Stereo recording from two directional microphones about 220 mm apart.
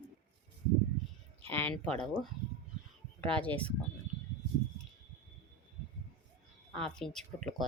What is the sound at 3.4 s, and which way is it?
Speech, 5° left (ahead or behind).